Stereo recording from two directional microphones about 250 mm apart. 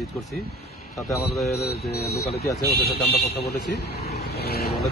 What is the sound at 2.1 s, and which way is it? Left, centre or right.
Speech, left.